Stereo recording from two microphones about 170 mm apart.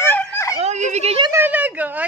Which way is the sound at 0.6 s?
45° right (ahead or behind).